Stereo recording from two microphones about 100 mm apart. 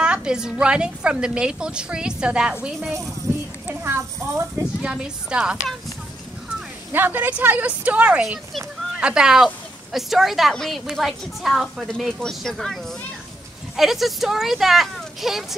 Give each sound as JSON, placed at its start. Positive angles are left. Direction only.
{"t": 0.0, "sound": "a woman's voice", "side_deg": -10}
{"t": 3.3, "sound": "a sound", "side_deg": -30}
{"t": 4.6, "sound": "a woman's voice", "side_deg": -10}
{"t": 6.9, "sound": "a woman's voice", "side_deg": -20}
{"t": 13.7, "sound": "a woman's voice", "side_deg": -5}